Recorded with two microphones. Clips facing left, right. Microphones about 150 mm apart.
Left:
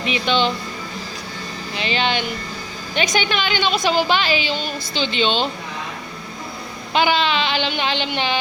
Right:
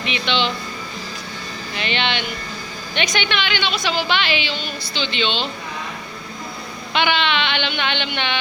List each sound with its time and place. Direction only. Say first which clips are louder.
0.0 s speech: left 3 dB; 40° left (ahead or behind)
1.7 s a woman's voice: left 2 dB; 35° left (ahead or behind)
6.9 s a woman's voice: left 2 dB; 35° left (ahead or behind)